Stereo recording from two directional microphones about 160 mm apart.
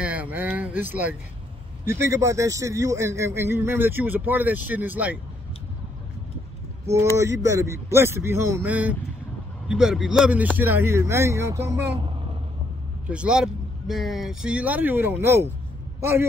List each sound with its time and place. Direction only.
0.0 s a sound: 10° right (ahead or behind)
1.9 s a man's voice: 20° right (ahead or behind)
7.2 s a man's voice: 20° right (ahead or behind)
13.1 s a man's voice: 5° right (ahead or behind)